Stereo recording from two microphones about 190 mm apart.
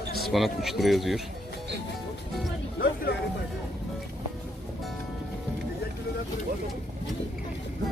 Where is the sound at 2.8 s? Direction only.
50° left (ahead or behind).